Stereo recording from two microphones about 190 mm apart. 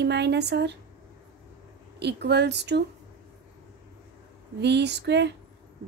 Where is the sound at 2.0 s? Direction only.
60° right (ahead or behind).